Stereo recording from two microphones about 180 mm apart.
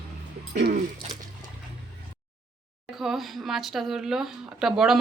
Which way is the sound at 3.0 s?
Centre (ahead or behind).